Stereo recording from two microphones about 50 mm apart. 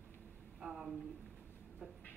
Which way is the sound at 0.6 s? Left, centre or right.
Centre.